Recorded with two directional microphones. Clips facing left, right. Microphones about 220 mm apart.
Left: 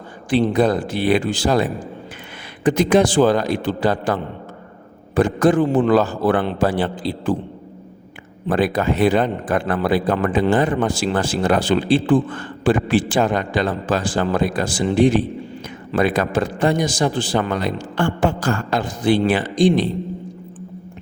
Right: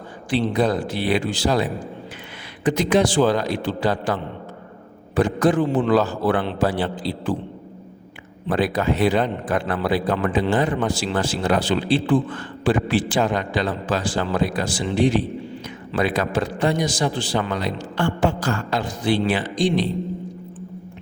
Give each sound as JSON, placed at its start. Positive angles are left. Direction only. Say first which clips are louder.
{"t": 0.3, "sound": "a man's voice", "louder": "left 4 dB", "side_deg": 50}
{"t": 8.4, "sound": "a man's voice", "louder": "left 2 dB", "side_deg": 50}